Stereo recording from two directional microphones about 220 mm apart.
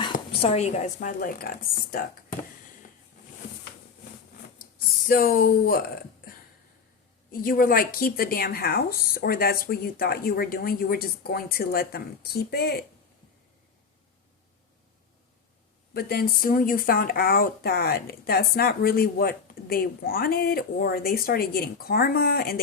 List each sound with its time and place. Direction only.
0.3 s a woman's voice: 25° left (ahead or behind)
4.5 s a sound: 40° left (ahead or behind)
7.3 s speech: 40° left (ahead or behind)
15.9 s speech: 45° left (ahead or behind)